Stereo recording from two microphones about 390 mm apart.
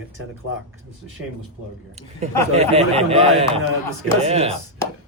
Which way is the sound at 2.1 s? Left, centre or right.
Centre.